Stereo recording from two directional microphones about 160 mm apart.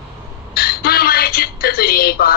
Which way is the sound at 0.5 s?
70° left (ahead or behind).